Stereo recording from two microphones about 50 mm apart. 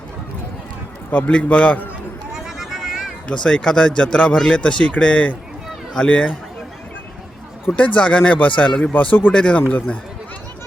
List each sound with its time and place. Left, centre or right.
1.1 s speech: left
2.3 s a sound: centre
3.2 s speech: centre
7.8 s speech: left
9.3 s speech: left